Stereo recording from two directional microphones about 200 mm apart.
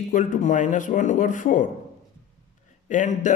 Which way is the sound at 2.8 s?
40° left (ahead or behind).